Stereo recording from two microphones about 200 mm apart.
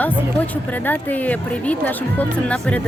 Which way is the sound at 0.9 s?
10° left (ahead or behind).